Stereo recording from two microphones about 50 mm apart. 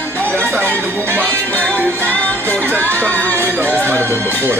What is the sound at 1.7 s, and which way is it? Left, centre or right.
Music, left.